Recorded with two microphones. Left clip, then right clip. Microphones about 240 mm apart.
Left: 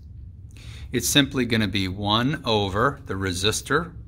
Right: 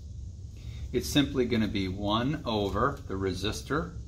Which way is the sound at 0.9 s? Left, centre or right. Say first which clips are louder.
Left 7 dB; left.